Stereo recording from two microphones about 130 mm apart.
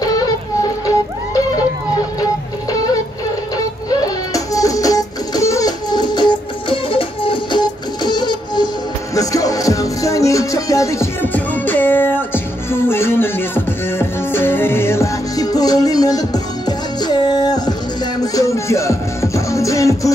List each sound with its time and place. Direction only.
0.0 s music: 30° left (ahead or behind)
2.7 s music: 30° left (ahead or behind)
11.3 s music: 15° left (ahead or behind)